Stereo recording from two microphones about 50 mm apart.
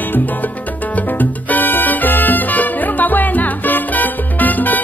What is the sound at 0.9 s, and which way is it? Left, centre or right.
Salsa music, left.